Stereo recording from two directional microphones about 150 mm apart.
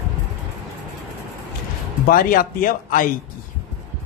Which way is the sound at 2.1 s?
75° left (ahead or behind).